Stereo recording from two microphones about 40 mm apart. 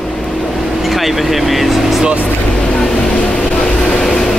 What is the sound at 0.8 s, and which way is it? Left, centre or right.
Speech, centre.